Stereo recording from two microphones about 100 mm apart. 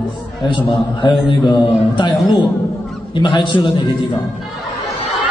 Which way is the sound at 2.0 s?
50° left (ahead or behind).